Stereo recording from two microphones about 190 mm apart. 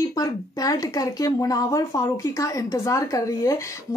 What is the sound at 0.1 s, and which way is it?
Speech, 20° left (ahead or behind).